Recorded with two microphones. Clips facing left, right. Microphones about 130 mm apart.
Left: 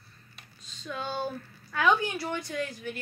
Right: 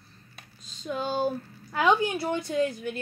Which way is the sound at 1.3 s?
30° right (ahead or behind).